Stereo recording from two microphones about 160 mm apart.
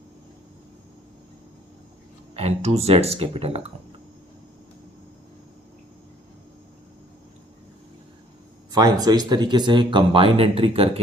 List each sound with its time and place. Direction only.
2.3 s speech: 40° right (ahead or behind)
8.7 s speech: 25° right (ahead or behind)